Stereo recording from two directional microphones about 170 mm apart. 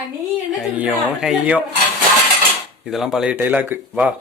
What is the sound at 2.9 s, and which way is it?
Speech, centre (ahead or behind).